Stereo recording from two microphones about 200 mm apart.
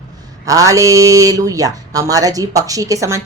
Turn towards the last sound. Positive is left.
turn(degrees=-15)  # may be behind; listen again after turning